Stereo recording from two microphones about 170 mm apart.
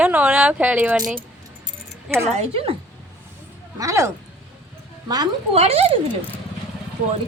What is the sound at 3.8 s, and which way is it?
Speech, 15° right (ahead or behind).